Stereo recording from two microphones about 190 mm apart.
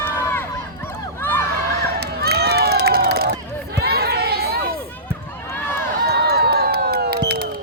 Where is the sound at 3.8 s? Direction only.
55° right (ahead or behind).